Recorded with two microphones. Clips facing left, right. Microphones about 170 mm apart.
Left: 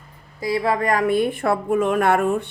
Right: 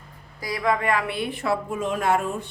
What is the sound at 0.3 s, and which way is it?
A woman's voice, 25° left (ahead or behind).